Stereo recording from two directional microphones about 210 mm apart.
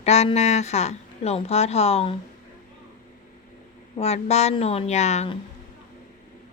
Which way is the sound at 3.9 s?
30° left (ahead or behind).